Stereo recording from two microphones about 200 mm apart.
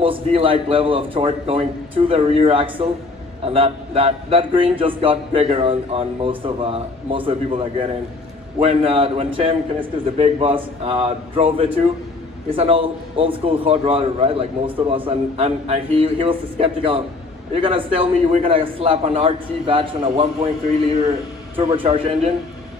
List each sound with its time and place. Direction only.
0.0 s a man's voice: 25° right (ahead or behind)